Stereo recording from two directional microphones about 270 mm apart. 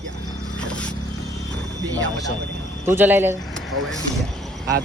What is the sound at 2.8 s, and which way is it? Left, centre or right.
Speech, centre.